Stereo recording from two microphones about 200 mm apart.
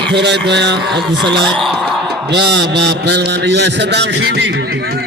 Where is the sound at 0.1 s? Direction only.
60° right (ahead or behind).